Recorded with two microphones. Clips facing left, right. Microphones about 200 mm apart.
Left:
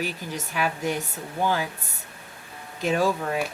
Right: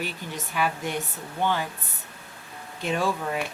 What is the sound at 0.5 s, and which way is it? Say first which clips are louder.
Speech: left 1 dB; 45° left (ahead or behind).